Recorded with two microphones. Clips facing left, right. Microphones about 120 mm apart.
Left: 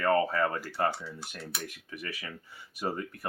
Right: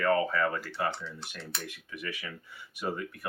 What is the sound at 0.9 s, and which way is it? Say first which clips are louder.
Speech: left 1 dB; 10° left (ahead or behind).